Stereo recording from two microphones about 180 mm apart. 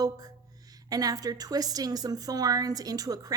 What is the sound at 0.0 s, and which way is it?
A woman's voice, 20° right (ahead or behind).